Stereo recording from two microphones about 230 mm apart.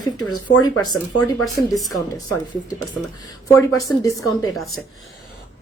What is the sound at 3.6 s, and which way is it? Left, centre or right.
Speech, centre.